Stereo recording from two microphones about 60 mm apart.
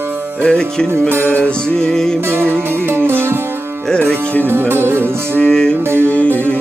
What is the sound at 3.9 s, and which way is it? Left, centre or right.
Music, centre.